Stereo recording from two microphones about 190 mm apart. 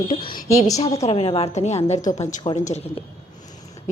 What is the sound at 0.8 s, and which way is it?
A woman's voice, 35° left (ahead or behind).